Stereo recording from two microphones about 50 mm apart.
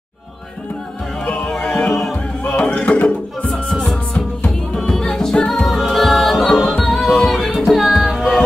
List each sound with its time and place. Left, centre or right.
1.2 s music: left
1.5 s music: centre
2.5 s music: left
4.7 s music: centre
5.7 s music: centre